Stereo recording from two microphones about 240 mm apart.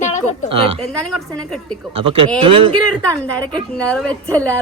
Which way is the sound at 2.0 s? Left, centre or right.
Right.